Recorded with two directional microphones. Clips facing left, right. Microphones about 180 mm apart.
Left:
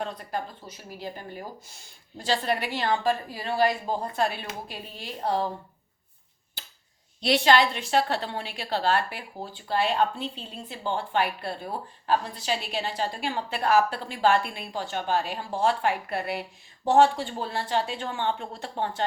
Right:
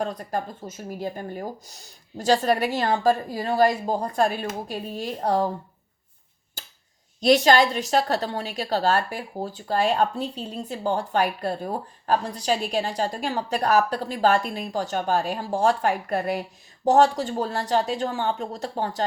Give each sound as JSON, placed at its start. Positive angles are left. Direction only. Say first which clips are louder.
{"t": 0.0, "sound": "a woman's voice", "louder": "right 4 dB", "side_deg": -45}
{"t": 6.6, "sound": "a sound", "louder": "right 3 dB", "side_deg": -45}
{"t": 7.2, "sound": "a woman's voice", "louder": "right 4 dB", "side_deg": -45}